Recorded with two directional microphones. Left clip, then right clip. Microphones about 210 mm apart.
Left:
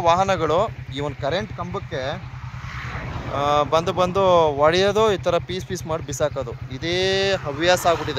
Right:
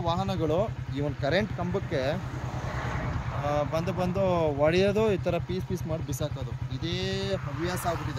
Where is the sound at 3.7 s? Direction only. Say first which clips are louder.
Left 11 dB; centre (ahead or behind).